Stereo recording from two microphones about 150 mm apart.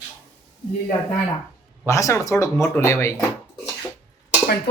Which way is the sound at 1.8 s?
20° left (ahead or behind).